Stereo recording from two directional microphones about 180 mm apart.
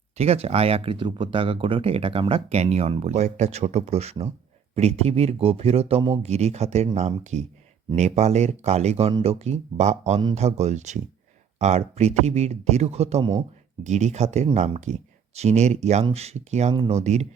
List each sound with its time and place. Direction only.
0.2 s speech: 35° right (ahead or behind)
16.7 s speech: 30° right (ahead or behind)
17.0 s speech: 40° right (ahead or behind)